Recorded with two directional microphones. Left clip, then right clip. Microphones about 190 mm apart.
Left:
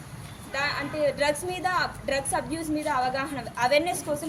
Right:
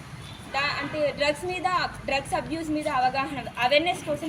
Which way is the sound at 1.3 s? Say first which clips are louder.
Right 1 dB; 10° left (ahead or behind).